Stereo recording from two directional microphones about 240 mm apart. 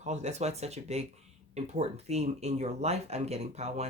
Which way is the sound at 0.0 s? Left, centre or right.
Right.